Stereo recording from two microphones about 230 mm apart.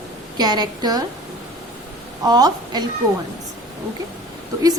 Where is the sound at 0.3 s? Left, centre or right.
Centre.